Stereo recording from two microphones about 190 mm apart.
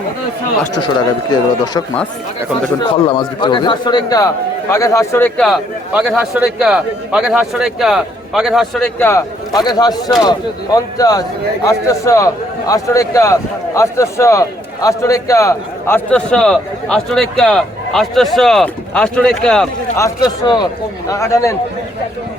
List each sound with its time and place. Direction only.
0.7 s a man's voice: 20° left (ahead or behind)
3.1 s a man's voice: 25° left (ahead or behind)
5.5 s a man's voice: centre (ahead or behind)
20.0 s a man's voice: 20° left (ahead or behind)